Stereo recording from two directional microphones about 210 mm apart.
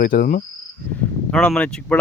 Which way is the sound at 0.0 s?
40° left (ahead or behind).